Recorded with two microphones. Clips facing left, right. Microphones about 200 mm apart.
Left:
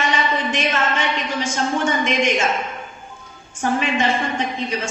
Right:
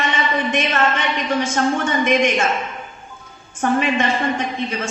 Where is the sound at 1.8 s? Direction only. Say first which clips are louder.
Right 2 dB; 60° right (ahead or behind).